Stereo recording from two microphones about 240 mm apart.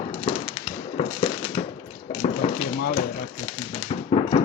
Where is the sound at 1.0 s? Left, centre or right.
Left.